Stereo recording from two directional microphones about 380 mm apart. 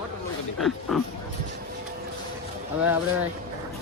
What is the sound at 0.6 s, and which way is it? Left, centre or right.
Speech, centre.